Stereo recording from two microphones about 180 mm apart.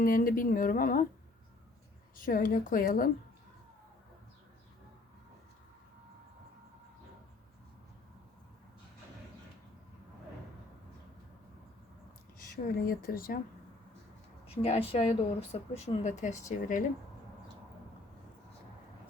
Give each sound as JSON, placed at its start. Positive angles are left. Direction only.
{"t": 0.0, "sound": "a woman's voice", "side_deg": 50}
{"t": 2.1, "sound": "a woman's voice", "side_deg": 50}
{"t": 12.6, "sound": "a woman's voice", "side_deg": 55}
{"t": 14.4, "sound": "a woman's voice", "side_deg": 35}